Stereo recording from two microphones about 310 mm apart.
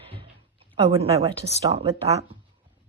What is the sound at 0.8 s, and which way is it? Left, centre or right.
Speech, centre.